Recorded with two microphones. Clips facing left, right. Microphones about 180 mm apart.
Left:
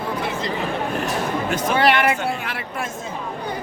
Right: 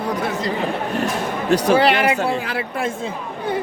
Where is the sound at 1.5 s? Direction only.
35° right (ahead or behind).